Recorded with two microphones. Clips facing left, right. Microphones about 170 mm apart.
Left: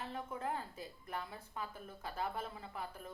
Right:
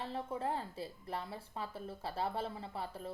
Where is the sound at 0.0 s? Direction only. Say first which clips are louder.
Right 3 dB; 30° right (ahead or behind).